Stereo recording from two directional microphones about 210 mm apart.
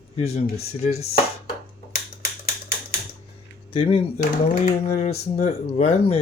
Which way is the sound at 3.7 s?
25° left (ahead or behind).